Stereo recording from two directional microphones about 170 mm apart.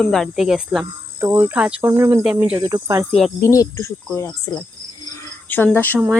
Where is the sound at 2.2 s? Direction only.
5° right (ahead or behind).